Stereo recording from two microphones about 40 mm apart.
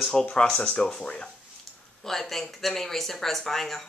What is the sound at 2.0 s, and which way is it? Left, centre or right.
Speech, centre.